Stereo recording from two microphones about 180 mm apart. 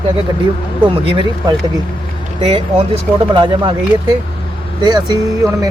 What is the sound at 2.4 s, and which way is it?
Speech, 35° right (ahead or behind).